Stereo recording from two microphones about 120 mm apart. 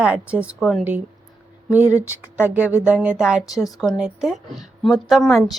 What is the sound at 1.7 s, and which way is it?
A woman's voice, 10° right (ahead or behind).